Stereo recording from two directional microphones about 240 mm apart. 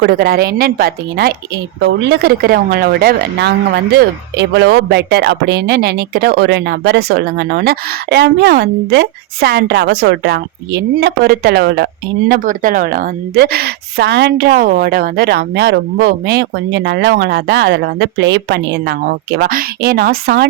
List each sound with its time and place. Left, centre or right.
0.0 s a woman's voice: right